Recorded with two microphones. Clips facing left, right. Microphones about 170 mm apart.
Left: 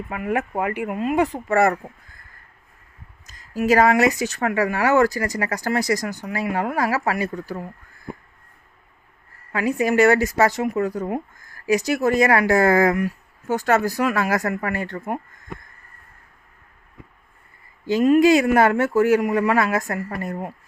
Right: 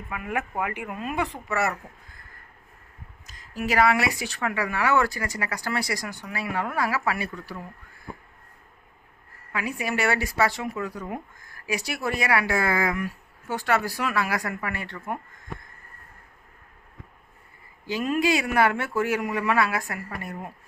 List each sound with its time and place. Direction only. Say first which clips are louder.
0.3 s speech: left 6 dB; 35° left (ahead or behind)
0.9 s speech: left 8 dB; 25° left (ahead or behind)
1.1 s speech: left 8 dB; 40° left (ahead or behind)
3.6 s speech: left 6 dB; 45° left (ahead or behind)
9.5 s speech: left 9 dB; 40° left (ahead or behind)
17.8 s speech: left 9 dB; 40° left (ahead or behind)